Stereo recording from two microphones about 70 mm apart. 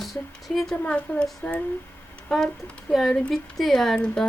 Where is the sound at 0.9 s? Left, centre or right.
Centre.